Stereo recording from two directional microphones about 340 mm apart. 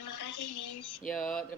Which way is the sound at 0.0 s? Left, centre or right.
Left.